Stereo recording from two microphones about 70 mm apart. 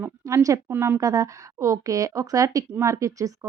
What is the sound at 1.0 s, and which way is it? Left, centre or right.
A woman's voice, right.